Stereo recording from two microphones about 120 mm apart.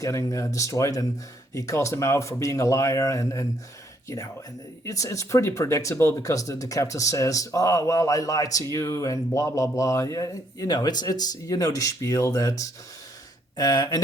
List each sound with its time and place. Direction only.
0.0 s speech: 25° left (ahead or behind)
4.9 s speech: 25° left (ahead or behind)